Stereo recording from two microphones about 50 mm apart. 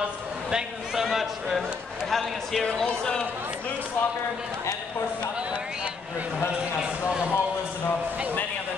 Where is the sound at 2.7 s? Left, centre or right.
Centre.